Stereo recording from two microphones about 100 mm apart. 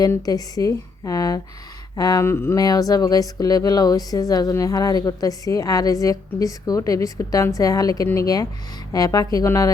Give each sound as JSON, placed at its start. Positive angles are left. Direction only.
{"t": 0.2, "sound": "speech", "side_deg": 40}
{"t": 2.2, "sound": "a sound", "side_deg": 25}
{"t": 2.6, "sound": "speech", "side_deg": 40}